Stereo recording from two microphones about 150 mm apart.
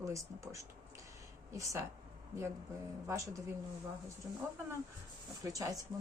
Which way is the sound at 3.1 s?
20° right (ahead or behind).